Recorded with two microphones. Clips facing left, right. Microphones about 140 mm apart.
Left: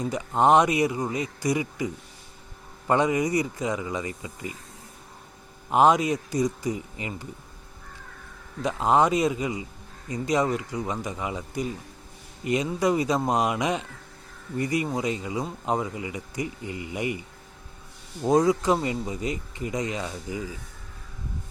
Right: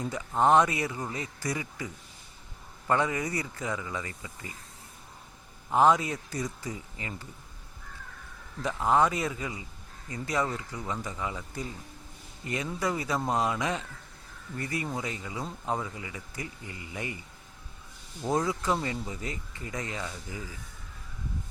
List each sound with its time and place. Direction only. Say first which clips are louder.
0.0 s speech: left 4 dB; 20° left (ahead or behind)
5.7 s speech: left 4 dB; 20° left (ahead or behind)
8.6 s speech: left 3 dB; 20° left (ahead or behind)
18.2 s speech: left 8 dB; 20° left (ahead or behind)